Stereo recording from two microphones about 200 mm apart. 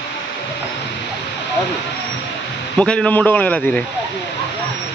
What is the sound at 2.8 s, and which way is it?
A man's voice, 5° left (ahead or behind).